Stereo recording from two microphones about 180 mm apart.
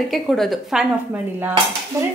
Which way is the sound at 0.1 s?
Centre (ahead or behind).